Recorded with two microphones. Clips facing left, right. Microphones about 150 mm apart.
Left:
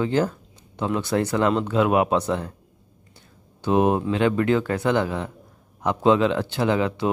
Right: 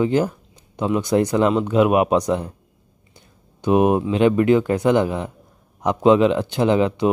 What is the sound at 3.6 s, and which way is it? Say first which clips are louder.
Speech: right 3 dB; 15° right (ahead or behind).